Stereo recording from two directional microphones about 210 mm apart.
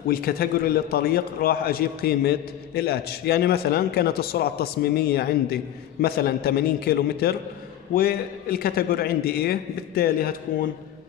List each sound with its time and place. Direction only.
0.0 s a man's voice: 45° left (ahead or behind)